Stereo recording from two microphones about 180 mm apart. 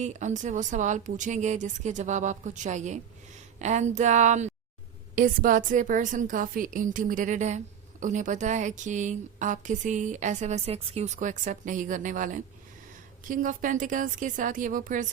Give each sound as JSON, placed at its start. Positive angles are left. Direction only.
{"t": 0.0, "sound": "a woman's voice", "side_deg": -40}